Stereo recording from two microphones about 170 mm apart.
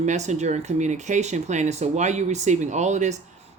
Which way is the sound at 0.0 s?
45° right (ahead or behind).